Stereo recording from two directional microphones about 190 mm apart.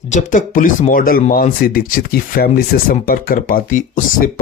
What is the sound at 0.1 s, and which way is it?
Speech, 40° left (ahead or behind).